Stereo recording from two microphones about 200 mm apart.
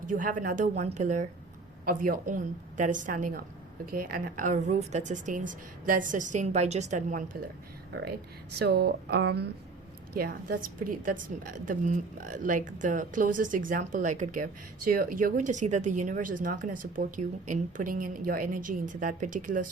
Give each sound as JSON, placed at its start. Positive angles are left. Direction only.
{"t": 0.1, "sound": "a woman's voice", "side_deg": -40}
{"t": 8.5, "sound": "a woman's voice", "side_deg": -55}